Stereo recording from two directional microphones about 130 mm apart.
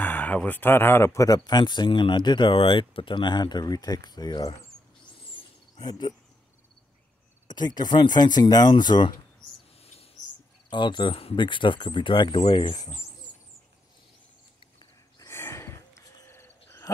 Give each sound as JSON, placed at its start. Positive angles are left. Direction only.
{"t": 0.0, "sound": "speech", "side_deg": 15}
{"t": 5.8, "sound": "speech", "side_deg": 35}
{"t": 7.4, "sound": "speech", "side_deg": 35}
{"t": 10.7, "sound": "speech", "side_deg": 35}
{"t": 15.1, "sound": "a sound", "side_deg": 20}